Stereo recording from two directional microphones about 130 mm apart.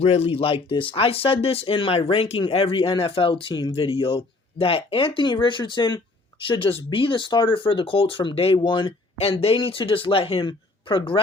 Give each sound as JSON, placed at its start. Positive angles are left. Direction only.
{"t": 0.0, "sound": "speech", "side_deg": 50}